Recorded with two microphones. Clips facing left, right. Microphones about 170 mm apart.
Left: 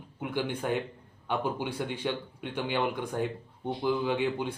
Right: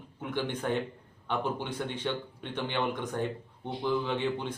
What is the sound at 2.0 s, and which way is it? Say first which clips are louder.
Speech: left 1 dB; 10° left (ahead or behind).